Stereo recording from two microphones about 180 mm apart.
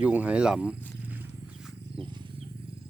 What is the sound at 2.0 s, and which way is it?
Wild animals, 25° right (ahead or behind).